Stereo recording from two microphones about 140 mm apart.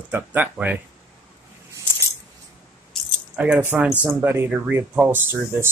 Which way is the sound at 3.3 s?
10° right (ahead or behind).